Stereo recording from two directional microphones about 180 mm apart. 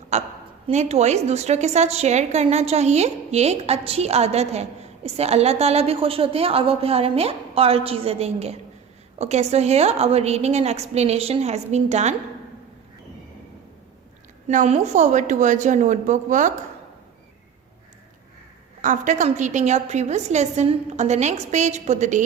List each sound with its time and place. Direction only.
0.1 s a sound: 40° right (ahead or behind)
0.7 s a woman's voice: 40° right (ahead or behind)
14.4 s a woman's voice: 40° right (ahead or behind)
18.8 s a woman's voice: 45° right (ahead or behind)